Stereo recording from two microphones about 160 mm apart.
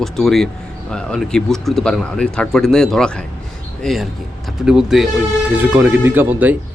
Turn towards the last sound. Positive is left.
turn(degrees=-10)  # may be behind; listen again after turning